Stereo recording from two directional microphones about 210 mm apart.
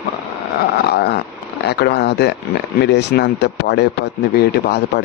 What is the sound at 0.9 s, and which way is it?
Speech, 50° left (ahead or behind).